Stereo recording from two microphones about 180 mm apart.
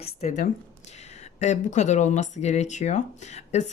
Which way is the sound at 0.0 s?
40° left (ahead or behind).